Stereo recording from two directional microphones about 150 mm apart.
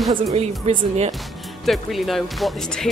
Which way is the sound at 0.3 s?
45° right (ahead or behind).